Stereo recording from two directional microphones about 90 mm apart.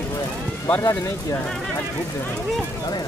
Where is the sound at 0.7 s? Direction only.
35° left (ahead or behind).